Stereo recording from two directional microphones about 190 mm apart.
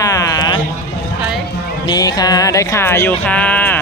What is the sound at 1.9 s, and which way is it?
Speech, 20° left (ahead or behind).